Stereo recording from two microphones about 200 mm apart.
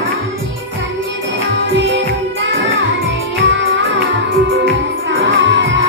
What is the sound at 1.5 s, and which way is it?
Music, 65° right (ahead or behind).